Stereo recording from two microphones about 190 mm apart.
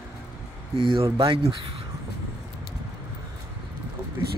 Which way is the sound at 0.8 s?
30° right (ahead or behind).